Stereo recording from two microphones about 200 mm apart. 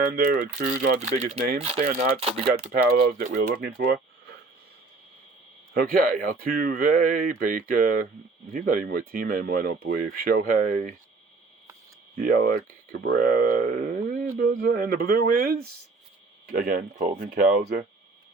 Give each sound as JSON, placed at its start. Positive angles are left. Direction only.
{"t": 0.1, "sound": "speech", "side_deg": -50}
{"t": 0.9, "sound": "speech", "side_deg": -35}
{"t": 2.7, "sound": "speech", "side_deg": -50}
{"t": 5.7, "sound": "speech", "side_deg": -50}
{"t": 12.2, "sound": "speech", "side_deg": -45}